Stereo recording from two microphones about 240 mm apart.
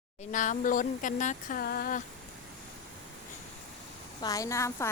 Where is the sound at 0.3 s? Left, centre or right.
Left.